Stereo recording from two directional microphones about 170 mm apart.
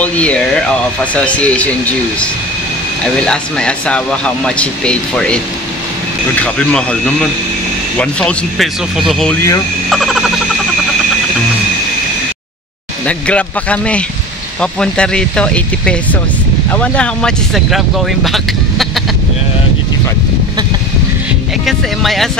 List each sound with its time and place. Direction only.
0.0 s speech: 5° left (ahead or behind)
3.3 s speech: 5° left (ahead or behind)
6.4 s speech: 5° left (ahead or behind)
9.3 s speech: 15° left (ahead or behind)
9.8 s speech: centre (ahead or behind)
13.0 s speech: 5° left (ahead or behind)
21.6 s speech: centre (ahead or behind)